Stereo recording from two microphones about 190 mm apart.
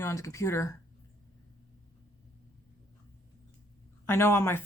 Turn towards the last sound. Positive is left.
turn(degrees=15)  # may be behind; listen again after turning